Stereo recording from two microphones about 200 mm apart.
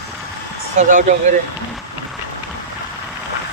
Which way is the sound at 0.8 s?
40° right (ahead or behind).